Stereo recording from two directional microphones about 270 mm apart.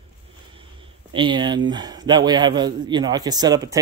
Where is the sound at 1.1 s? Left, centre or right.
Centre.